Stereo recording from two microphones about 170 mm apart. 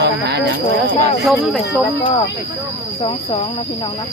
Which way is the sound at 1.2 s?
Centre (ahead or behind).